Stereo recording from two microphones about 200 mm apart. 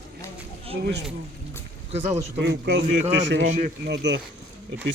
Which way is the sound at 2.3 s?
60° right (ahead or behind).